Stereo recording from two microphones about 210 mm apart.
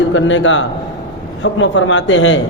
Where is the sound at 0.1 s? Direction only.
65° left (ahead or behind).